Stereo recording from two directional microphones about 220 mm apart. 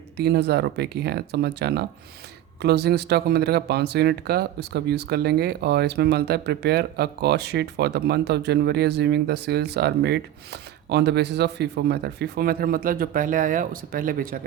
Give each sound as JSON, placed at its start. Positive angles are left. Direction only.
{"t": 0.2, "sound": "speech", "side_deg": -50}